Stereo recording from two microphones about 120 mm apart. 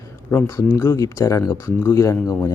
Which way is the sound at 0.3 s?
25° left (ahead or behind).